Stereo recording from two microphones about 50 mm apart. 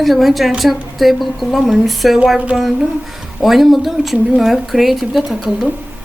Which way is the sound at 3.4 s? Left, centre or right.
Centre.